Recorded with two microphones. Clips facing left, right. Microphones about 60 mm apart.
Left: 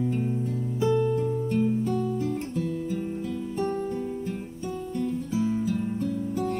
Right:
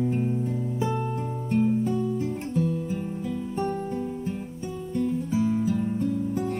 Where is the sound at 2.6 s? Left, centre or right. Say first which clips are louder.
Right 2 dB; right.